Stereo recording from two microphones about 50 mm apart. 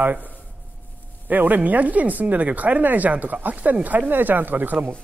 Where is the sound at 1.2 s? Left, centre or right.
Right.